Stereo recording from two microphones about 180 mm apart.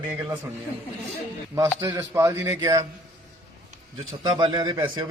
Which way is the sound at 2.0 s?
15° right (ahead or behind).